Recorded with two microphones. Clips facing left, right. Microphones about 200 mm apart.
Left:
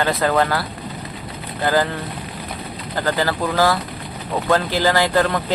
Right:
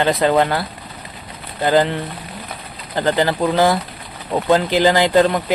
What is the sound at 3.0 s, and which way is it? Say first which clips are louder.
Speech: right 4 dB; 20° right (ahead or behind).